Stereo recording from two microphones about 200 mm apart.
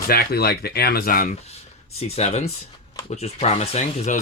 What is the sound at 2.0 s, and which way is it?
Speech, 35° left (ahead or behind).